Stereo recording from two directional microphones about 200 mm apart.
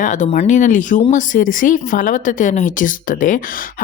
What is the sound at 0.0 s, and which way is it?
Speech, 40° left (ahead or behind).